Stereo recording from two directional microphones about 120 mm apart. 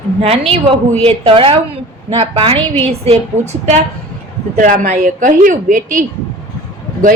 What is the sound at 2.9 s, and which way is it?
Speech, 65° right (ahead or behind).